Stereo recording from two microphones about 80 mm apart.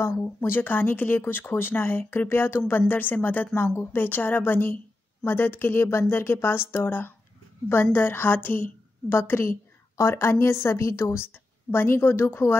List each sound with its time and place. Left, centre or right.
0.2 s a woman's voice: left